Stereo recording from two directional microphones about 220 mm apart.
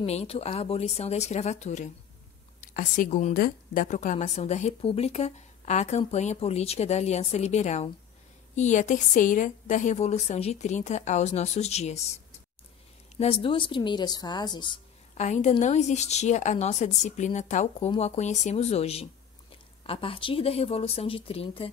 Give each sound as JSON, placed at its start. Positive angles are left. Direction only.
{"t": 0.0, "sound": "a woman's voice", "side_deg": 30}
{"t": 15.1, "sound": "a woman's voice", "side_deg": 30}